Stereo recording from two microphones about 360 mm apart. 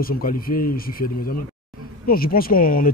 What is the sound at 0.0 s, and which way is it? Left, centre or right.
Speech, left.